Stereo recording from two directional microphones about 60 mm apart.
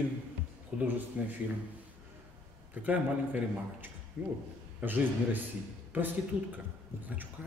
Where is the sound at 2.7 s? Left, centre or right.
Right.